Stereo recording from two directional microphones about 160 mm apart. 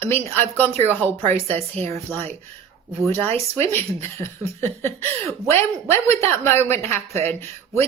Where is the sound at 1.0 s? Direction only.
40° right (ahead or behind).